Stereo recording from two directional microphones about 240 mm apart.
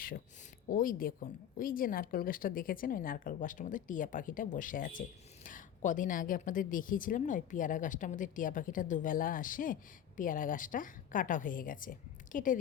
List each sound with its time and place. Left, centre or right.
0.7 s a woman's voice: left